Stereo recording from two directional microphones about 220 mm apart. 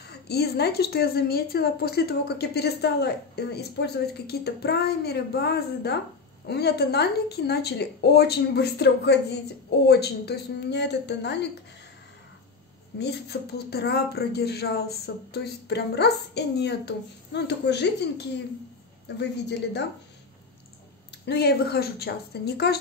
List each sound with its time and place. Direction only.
0.0 s a woman's voice: 45° left (ahead or behind)
13.0 s a woman's voice: 50° left (ahead or behind)
21.3 s a woman's voice: 50° left (ahead or behind)